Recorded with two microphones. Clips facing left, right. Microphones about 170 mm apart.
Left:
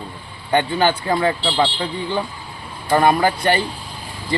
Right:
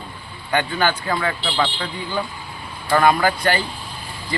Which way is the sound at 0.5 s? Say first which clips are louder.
Left 3 dB; 25° left (ahead or behind).